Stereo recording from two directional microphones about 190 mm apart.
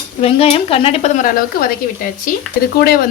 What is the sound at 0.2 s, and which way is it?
Speech, 30° left (ahead or behind).